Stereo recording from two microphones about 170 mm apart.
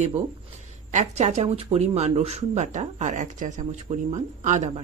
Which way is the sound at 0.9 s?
40° right (ahead or behind).